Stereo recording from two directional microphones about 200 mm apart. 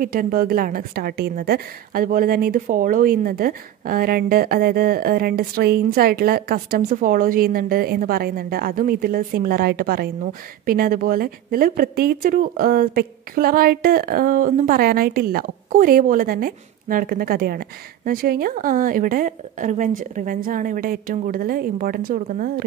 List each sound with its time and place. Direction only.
0.0 s a woman's voice: 45° right (ahead or behind)